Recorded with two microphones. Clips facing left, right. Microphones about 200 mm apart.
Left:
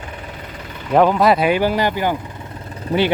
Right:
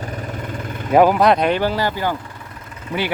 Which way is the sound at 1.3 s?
5° left (ahead or behind).